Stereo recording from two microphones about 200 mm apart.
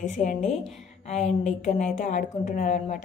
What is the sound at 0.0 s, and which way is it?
A woman's voice, 40° left (ahead or behind).